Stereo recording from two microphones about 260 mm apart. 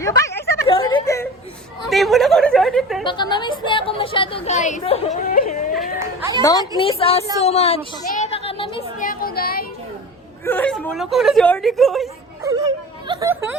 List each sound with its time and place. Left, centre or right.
0.0 s a sound: centre
0.7 s whimper: centre
1.9 s speech: centre
3.0 s a woman's voice: centre
6.4 s a woman's voice: centre
7.3 s a sound: left
9.0 s a sound: left
10.4 s speech: centre
12.4 s whimper: centre